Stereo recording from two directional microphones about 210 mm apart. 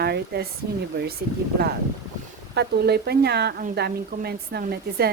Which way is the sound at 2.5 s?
50° right (ahead or behind).